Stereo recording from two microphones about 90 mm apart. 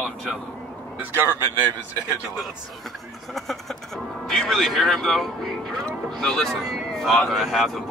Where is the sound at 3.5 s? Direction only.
5° left (ahead or behind).